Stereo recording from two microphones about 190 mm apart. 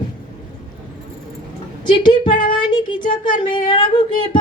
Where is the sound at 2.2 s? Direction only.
45° left (ahead or behind).